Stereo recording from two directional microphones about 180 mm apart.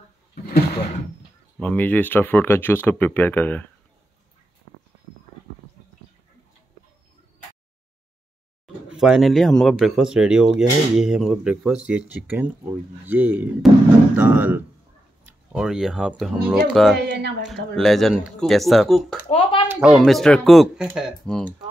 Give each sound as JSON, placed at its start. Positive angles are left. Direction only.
{"t": 1.6, "sound": "speech", "side_deg": 5}
{"t": 8.8, "sound": "speech", "side_deg": 0}
{"t": 19.2, "sound": "speech", "side_deg": 30}
{"t": 19.7, "sound": "speech", "side_deg": -5}